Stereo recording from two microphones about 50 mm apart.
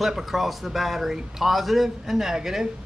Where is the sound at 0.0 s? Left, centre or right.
Centre.